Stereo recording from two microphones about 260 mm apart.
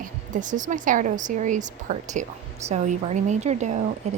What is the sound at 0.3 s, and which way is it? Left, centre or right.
A woman's voice, right.